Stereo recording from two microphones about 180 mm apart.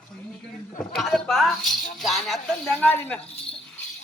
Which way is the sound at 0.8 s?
Centre (ahead or behind).